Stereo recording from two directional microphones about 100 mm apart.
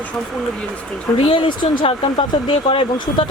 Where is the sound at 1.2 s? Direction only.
65° left (ahead or behind).